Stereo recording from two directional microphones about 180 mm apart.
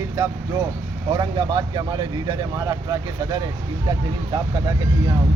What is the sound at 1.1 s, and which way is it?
Speech, 20° right (ahead or behind).